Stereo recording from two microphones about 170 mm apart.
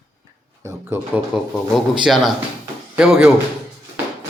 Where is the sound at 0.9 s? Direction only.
15° right (ahead or behind).